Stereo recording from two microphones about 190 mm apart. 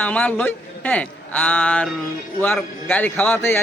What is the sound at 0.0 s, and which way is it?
A man's voice, 5° left (ahead or behind).